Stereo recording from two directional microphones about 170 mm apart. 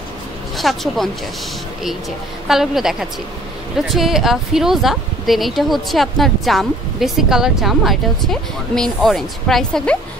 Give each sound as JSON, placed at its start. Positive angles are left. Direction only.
{"t": 0.6, "sound": "speech", "side_deg": 0}
{"t": 2.4, "sound": "speech", "side_deg": 0}